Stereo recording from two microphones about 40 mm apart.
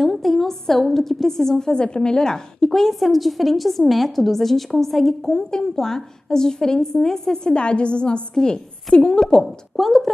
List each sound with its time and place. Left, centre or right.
0.0 s a woman's voice: centre
2.8 s a woman's voice: centre
5.5 s a woman's voice: centre
7.4 s a woman's voice: left
9.4 s a woman's voice: centre